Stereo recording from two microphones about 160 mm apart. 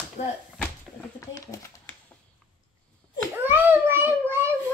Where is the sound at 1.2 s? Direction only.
20° left (ahead or behind).